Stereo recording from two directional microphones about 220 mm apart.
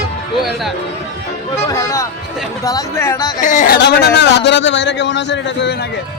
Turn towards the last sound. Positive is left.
turn(degrees=55)  # may be behind; listen again after turning